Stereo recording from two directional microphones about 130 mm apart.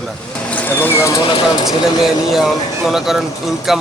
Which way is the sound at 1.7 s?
Centre (ahead or behind).